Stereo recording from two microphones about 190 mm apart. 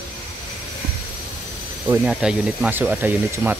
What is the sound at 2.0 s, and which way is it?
Speech, 5° right (ahead or behind).